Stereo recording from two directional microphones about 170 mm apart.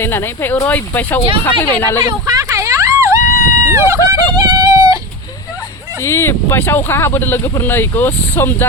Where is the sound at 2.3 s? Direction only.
20° right (ahead or behind).